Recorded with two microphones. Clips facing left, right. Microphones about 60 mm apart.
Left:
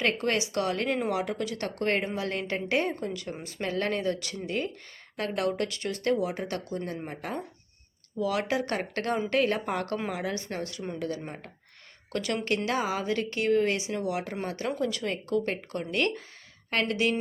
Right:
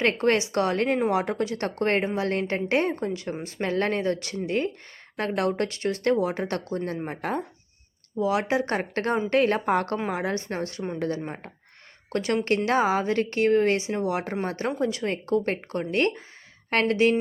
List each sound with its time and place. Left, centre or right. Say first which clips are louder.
0.0 s speech: right 5 dB; right
8.2 s speech: right 4 dB; right
12.1 s speech: right 5 dB; right